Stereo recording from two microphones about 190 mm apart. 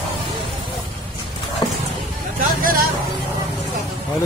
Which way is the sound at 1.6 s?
20° left (ahead or behind).